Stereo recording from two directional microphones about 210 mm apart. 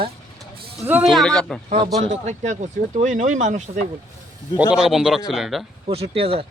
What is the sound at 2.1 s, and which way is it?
Speech, 35° right (ahead or behind).